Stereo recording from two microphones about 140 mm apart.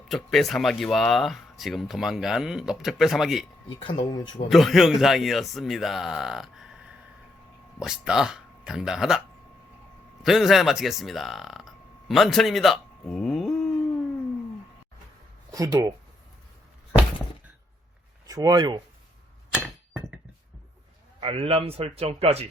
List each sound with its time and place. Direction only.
0.1 s speech: centre (ahead or behind)
3.8 s speech: 35° left (ahead or behind)
4.4 s speech: centre (ahead or behind)
8.0 s speech: 5° right (ahead or behind)
10.2 s speech: centre (ahead or behind)
15.5 s speech: 25° right (ahead or behind)
18.3 s speech: 25° right (ahead or behind)
21.2 s a man's voice: 40° right (ahead or behind)